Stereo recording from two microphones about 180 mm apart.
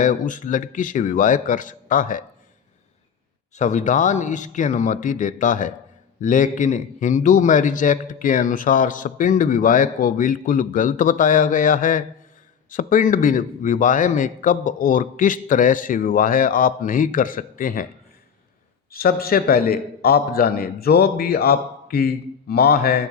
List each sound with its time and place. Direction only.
0.0 s a man's voice: 45° left (ahead or behind)
3.5 s a man's voice: 40° left (ahead or behind)
18.9 s a man's voice: 55° left (ahead or behind)